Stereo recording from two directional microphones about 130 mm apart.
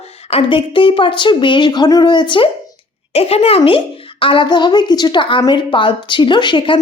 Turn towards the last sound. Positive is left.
turn(degrees=40)  # may be behind; listen again after turning